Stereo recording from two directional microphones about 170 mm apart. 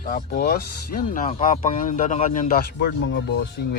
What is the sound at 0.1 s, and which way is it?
Speech, 65° left (ahead or behind).